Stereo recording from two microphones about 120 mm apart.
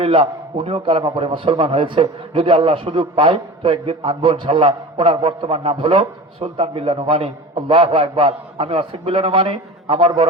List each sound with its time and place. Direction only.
0.0 s a man's voice: 55° right (ahead or behind)